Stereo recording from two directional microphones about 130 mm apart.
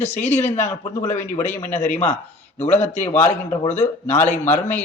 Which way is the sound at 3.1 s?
20° left (ahead or behind).